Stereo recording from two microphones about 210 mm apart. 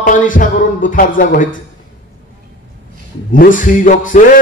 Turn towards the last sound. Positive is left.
turn(degrees=40)  # may be behind; listen again after turning